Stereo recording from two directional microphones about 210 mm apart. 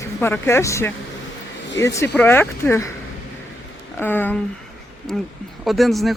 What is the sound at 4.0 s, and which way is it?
Speech, 10° left (ahead or behind).